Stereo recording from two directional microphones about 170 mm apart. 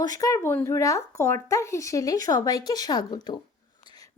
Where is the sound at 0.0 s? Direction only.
20° left (ahead or behind).